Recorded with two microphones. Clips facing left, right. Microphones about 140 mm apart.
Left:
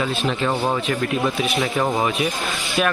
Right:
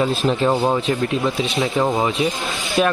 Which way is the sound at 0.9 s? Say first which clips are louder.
Right 2 dB; 20° right (ahead or behind).